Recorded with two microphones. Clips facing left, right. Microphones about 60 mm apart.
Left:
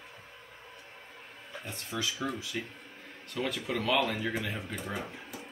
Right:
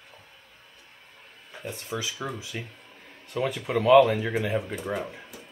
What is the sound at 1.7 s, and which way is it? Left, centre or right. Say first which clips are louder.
Speech: right 3 dB; centre.